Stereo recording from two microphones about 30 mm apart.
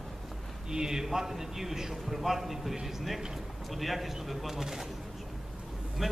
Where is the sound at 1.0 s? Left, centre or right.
Centre.